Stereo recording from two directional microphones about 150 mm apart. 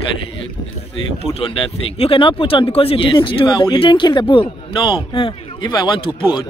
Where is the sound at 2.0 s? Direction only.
35° left (ahead or behind).